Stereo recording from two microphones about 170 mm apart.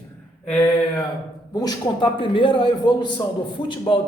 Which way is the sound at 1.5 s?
25° left (ahead or behind).